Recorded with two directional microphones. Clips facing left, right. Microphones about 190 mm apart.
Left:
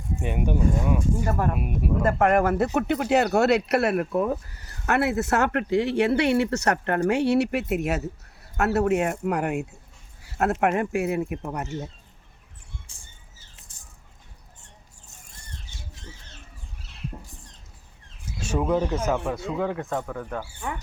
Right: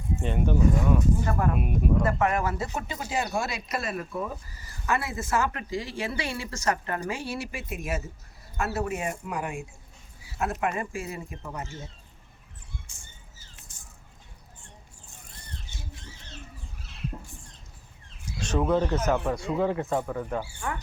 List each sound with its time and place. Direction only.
0.2 s speech: 10° left (ahead or behind)
2.0 s speech: 55° left (ahead or behind)
18.3 s speech: 5° left (ahead or behind)